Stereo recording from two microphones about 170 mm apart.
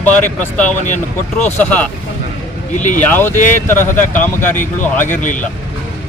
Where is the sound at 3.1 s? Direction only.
10° left (ahead or behind).